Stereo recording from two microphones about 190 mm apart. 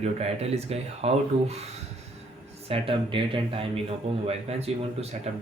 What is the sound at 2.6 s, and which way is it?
Speech, 30° right (ahead or behind).